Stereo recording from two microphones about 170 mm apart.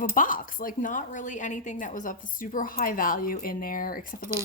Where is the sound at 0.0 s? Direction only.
50° left (ahead or behind).